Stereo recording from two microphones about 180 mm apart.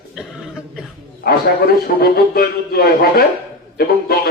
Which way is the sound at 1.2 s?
60° left (ahead or behind).